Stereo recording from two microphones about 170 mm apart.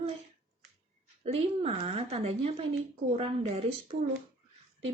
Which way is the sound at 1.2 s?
35° right (ahead or behind).